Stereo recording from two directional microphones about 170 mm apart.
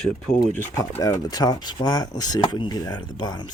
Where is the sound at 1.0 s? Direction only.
20° left (ahead or behind).